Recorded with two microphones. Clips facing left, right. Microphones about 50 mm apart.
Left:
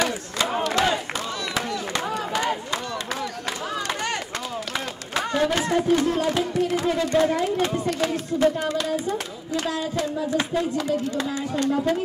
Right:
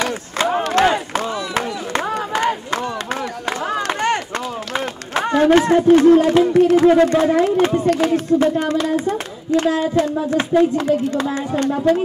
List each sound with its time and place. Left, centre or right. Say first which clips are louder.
0.7 s crowd: right 6 dB; right
4.7 s a man's voice: right 7 dB; right
8.0 s speech: right 6 dB; right
9.7 s speech: right 7 dB; right